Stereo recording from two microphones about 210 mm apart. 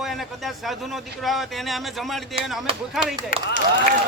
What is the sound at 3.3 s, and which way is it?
Speech, 45° left (ahead or behind).